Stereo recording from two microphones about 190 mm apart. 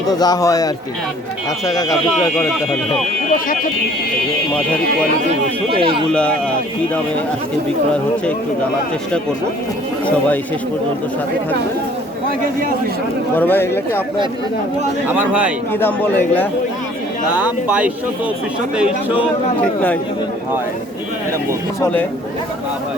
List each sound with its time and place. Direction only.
0.1 s a man's voice: 20° left (ahead or behind)
5.8 s speech: 30° right (ahead or behind)
13.3 s a man's voice: 10° left (ahead or behind)
15.1 s speech: 10° right (ahead or behind)
15.7 s a man's voice: 10° left (ahead or behind)
17.3 s speech: 10° right (ahead or behind)